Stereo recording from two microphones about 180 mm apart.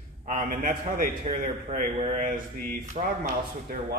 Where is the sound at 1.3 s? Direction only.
35° right (ahead or behind).